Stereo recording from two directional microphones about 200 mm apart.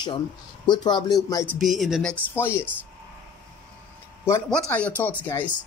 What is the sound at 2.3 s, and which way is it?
Speech, 10° left (ahead or behind).